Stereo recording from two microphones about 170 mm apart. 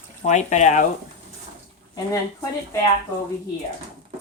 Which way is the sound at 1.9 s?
20° left (ahead or behind).